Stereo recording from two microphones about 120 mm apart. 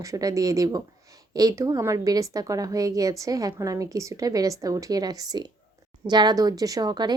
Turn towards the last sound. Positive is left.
turn(degrees=-35)  # may be behind; listen again after turning